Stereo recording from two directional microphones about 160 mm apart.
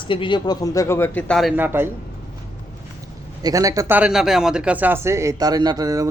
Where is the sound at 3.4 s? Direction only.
20° right (ahead or behind).